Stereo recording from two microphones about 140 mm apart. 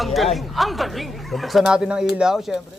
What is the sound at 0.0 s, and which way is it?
Speech, centre (ahead or behind).